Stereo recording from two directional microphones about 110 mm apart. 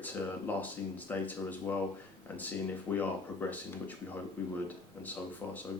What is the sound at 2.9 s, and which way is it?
Speech, 15° left (ahead or behind).